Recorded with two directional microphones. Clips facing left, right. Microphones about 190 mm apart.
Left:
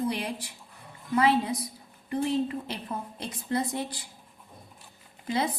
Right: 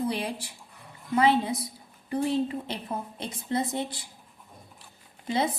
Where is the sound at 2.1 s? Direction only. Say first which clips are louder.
Right 1 dB; 25° right (ahead or behind).